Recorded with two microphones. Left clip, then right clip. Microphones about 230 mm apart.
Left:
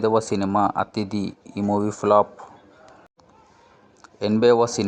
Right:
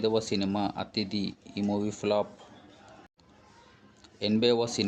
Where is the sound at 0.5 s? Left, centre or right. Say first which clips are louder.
Left 11 dB; left.